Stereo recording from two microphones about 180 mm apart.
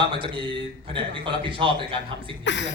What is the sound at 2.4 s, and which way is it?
Speech, 90° left.